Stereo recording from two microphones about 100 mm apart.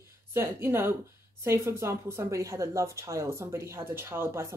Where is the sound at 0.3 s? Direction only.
20° right (ahead or behind).